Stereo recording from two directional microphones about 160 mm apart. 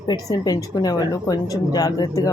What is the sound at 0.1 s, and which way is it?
Speech, 25° left (ahead or behind).